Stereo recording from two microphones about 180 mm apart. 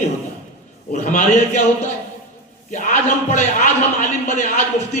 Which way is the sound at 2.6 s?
45° left (ahead or behind).